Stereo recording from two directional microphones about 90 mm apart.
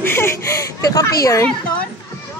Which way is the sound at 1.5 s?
15° left (ahead or behind).